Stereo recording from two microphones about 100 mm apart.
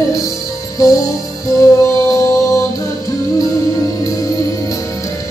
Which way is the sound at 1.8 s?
30° left (ahead or behind).